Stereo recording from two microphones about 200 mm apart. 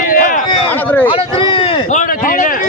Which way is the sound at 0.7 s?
10° left (ahead or behind).